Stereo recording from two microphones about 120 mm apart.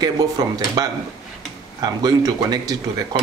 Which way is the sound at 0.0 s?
30° right (ahead or behind).